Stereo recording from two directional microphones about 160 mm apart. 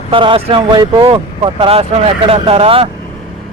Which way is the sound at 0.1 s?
35° right (ahead or behind).